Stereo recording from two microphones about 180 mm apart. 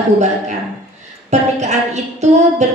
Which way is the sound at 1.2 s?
40° right (ahead or behind).